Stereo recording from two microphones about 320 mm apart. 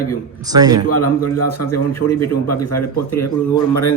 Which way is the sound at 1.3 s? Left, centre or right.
Left.